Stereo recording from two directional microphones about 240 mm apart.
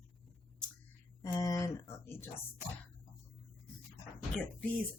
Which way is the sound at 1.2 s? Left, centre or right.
Centre.